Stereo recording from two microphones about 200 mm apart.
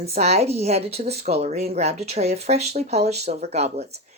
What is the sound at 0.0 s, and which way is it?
A woman's voice, 30° right (ahead or behind).